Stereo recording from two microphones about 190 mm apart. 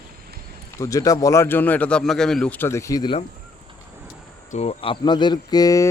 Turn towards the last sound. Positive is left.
turn(degrees=20)  # may be behind; listen again after turning